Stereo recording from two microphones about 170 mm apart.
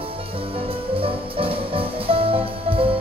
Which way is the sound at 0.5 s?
30° right (ahead or behind).